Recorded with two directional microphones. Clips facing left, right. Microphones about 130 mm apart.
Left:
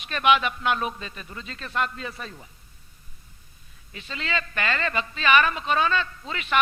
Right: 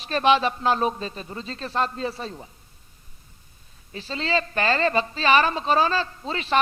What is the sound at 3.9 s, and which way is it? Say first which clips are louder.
A man's voice: right 6 dB; 30° right (ahead or behind).